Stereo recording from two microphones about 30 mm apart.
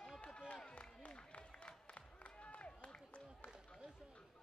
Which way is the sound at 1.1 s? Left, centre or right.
Left.